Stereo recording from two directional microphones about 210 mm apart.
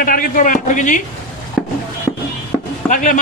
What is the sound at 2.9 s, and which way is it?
Speech, 40° left (ahead or behind).